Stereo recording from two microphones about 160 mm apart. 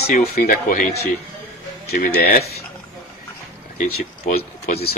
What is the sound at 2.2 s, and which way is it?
Speech, 75° left (ahead or behind).